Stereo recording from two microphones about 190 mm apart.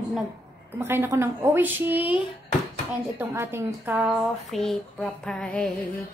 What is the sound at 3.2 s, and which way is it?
A woman's voice, 15° right (ahead or behind).